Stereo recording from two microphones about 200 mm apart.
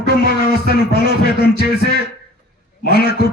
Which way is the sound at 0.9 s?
55° left (ahead or behind).